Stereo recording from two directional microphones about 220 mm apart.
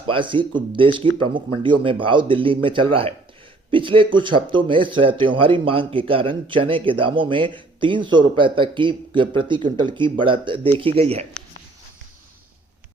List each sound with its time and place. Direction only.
0.1 s a man's voice: 20° right (ahead or behind)